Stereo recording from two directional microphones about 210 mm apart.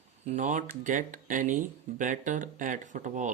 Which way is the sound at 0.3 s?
35° right (ahead or behind).